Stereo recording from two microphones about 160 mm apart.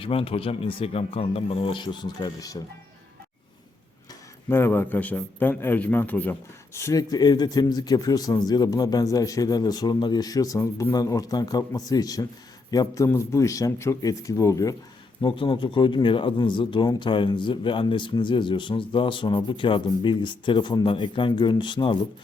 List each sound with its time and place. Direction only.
0.0 s speech: 35° left (ahead or behind)
4.4 s a man's voice: 15° left (ahead or behind)